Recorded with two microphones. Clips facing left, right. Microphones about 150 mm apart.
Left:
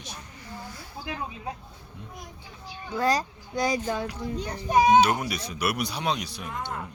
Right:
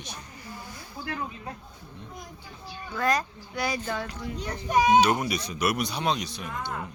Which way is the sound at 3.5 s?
20° left (ahead or behind).